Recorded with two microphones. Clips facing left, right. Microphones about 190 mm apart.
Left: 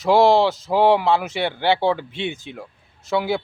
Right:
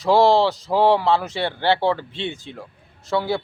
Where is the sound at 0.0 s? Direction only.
20° left (ahead or behind).